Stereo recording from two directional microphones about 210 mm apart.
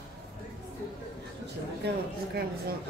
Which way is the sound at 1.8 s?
55° right (ahead or behind).